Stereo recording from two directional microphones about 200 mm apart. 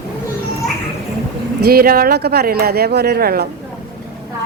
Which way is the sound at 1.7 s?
50° right (ahead or behind).